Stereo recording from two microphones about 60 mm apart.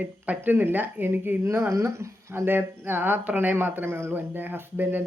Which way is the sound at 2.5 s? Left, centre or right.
Right.